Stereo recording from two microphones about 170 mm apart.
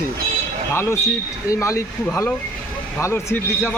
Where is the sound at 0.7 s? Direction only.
15° left (ahead or behind).